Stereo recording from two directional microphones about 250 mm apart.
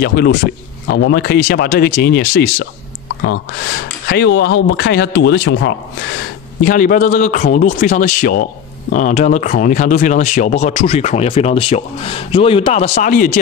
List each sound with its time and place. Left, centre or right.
0.0 s speech: left
6.6 s speech: left